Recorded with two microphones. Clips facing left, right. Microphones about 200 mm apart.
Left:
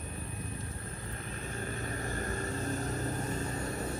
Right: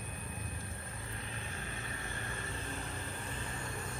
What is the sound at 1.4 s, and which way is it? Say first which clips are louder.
Vehicle: left 7 dB; 45° left (ahead or behind).